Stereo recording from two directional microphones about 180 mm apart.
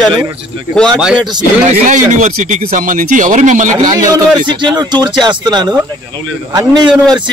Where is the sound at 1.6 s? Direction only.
45° right (ahead or behind).